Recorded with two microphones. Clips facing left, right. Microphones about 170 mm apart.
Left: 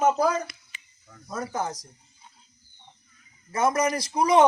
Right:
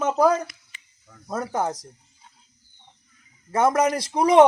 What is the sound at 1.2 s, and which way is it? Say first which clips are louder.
Speech: right 4 dB; 55° right (ahead or behind).